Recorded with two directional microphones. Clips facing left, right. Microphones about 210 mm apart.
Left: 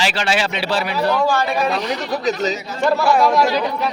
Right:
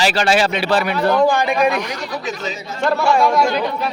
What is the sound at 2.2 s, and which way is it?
Speech, 40° left (ahead or behind).